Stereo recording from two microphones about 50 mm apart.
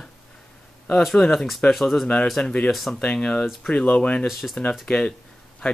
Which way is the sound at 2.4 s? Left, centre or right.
Left.